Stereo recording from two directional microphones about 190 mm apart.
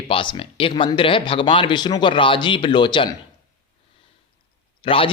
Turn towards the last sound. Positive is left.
turn(degrees=30)  # may be behind; listen again after turning